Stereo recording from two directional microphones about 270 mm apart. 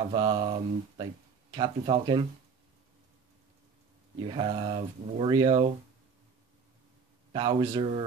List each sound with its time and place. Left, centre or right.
0.1 s speech: centre
4.3 s speech: centre
7.3 s speech: centre